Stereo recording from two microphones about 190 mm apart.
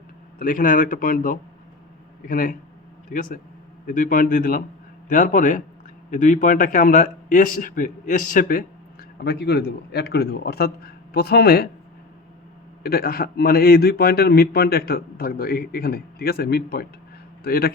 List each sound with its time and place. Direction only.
0.3 s a man's voice: 45° left (ahead or behind)
9.2 s a man's voice: 60° left (ahead or behind)
12.8 s a man's voice: 55° left (ahead or behind)